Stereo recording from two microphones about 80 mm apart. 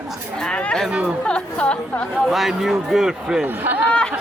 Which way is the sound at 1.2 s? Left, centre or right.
Centre.